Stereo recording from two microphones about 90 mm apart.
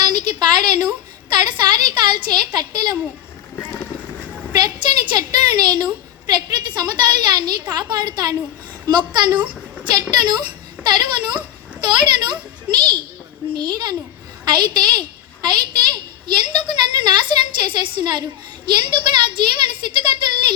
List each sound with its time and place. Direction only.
0.0 s a woman's voice: 55° right (ahead or behind)
3.5 s run: 25° left (ahead or behind)
4.5 s a woman's voice: 55° right (ahead or behind)